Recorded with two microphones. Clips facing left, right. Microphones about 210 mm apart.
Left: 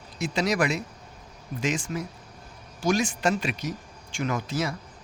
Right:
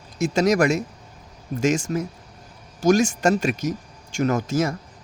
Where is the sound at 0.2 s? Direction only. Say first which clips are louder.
Right 7 dB; 45° right (ahead or behind).